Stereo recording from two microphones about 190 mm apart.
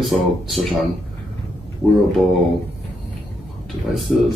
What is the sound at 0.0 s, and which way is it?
Speech, centre (ahead or behind).